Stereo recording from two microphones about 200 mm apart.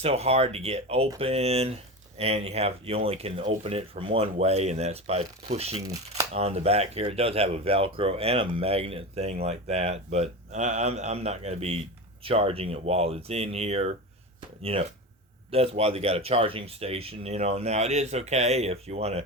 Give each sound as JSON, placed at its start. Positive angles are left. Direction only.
{"t": 0.0, "sound": "speech", "side_deg": -30}